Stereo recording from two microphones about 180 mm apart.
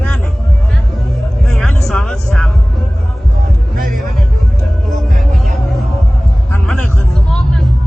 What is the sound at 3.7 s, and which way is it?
Music, 50° right (ahead or behind).